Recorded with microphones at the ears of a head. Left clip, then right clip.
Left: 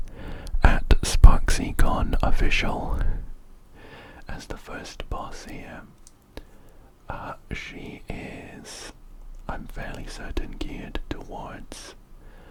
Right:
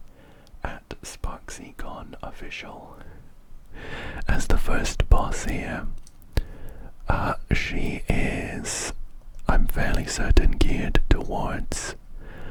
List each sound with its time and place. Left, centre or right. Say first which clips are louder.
0.1 s whispering: left 11 dB; left
3.8 s speech: right 9 dB; right